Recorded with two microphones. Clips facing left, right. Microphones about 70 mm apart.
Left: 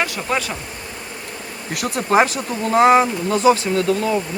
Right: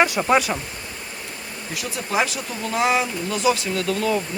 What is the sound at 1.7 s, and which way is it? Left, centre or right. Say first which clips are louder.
Speech: left 8 dB; left.